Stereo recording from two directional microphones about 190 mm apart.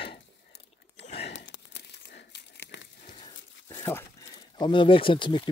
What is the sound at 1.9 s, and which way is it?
Crumpling, 65° left (ahead or behind).